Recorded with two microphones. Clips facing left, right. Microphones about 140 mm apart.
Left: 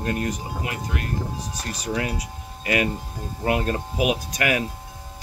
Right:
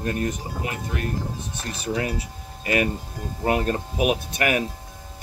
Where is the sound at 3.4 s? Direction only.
30° right (ahead or behind).